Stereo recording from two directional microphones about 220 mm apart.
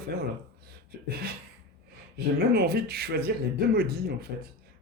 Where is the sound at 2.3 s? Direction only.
45° right (ahead or behind).